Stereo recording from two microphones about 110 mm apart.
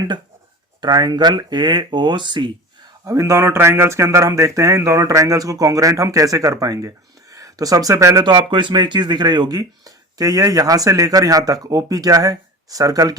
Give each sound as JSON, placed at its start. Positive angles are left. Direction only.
{"t": 0.8, "sound": "speech", "side_deg": -40}
{"t": 3.0, "sound": "speech", "side_deg": -30}